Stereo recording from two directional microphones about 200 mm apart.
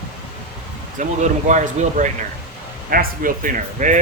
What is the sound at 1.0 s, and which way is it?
Speech, 40° right (ahead or behind).